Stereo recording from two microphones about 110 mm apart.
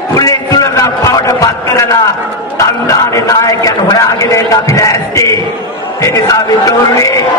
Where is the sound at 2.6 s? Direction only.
30° left (ahead or behind).